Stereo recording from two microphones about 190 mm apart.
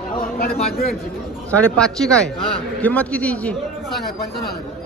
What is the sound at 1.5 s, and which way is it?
A man's voice, 5° left (ahead or behind).